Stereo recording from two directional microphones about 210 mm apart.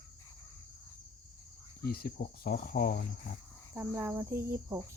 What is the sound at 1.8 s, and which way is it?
Speech, 45° left (ahead or behind).